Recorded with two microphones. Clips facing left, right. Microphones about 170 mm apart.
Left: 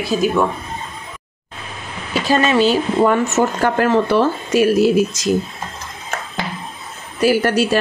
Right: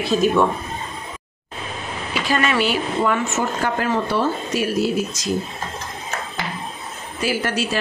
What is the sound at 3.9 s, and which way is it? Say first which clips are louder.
Speech: left 5 dB; 90° left.